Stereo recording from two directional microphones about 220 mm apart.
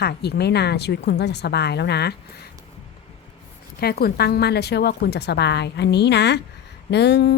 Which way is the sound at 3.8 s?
45° left (ahead or behind).